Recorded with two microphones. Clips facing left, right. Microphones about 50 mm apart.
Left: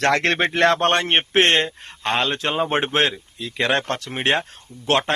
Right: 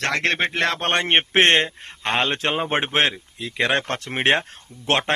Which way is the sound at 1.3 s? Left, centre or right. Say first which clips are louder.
Even; right.